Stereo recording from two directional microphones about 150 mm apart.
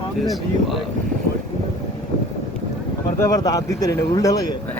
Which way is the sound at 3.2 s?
20° left (ahead or behind).